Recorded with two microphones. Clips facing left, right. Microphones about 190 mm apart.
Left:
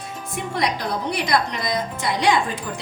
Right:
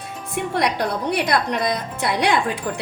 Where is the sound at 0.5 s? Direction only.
60° right (ahead or behind).